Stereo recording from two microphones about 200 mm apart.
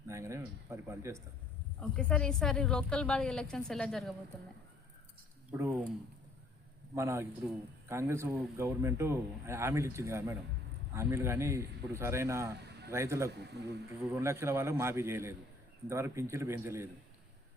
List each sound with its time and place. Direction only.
0.1 s a man's voice: 15° right (ahead or behind)
1.8 s a woman's voice: 5° left (ahead or behind)
5.5 s speech: 15° right (ahead or behind)
6.9 s a man's voice: 15° right (ahead or behind)
13.6 s speech: 55° right (ahead or behind)
14.1 s a man's voice: 15° right (ahead or behind)